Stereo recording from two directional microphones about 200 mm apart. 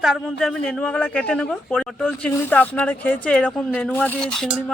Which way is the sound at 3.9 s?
10° left (ahead or behind).